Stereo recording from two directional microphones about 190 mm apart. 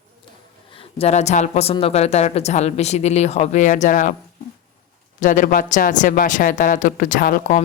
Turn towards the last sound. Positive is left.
turn(degrees=45)  # may be behind; listen again after turning